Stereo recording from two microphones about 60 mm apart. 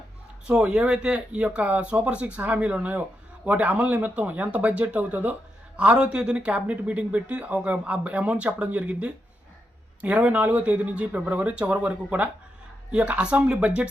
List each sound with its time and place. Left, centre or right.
0.4 s speech: centre